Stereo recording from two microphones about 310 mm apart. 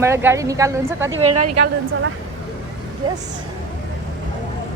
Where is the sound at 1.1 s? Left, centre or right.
Right.